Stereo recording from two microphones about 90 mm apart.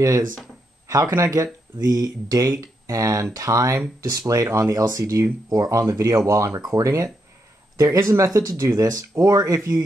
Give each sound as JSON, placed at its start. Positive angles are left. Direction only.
{"t": 0.0, "sound": "speech", "side_deg": -40}